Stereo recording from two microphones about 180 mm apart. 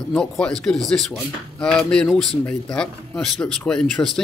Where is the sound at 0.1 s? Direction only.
5° left (ahead or behind).